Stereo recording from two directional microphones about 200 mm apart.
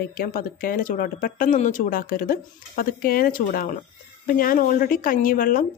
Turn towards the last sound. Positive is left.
turn(degrees=45)  # may be behind; listen again after turning